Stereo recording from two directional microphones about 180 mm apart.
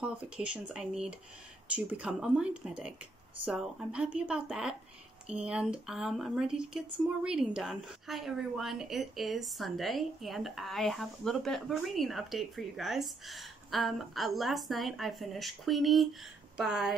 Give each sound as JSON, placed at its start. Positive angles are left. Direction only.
{"t": 0.0, "sound": "a woman's voice", "side_deg": -5}